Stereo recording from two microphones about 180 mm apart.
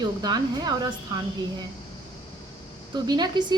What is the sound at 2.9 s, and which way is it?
Speech, 20° right (ahead or behind).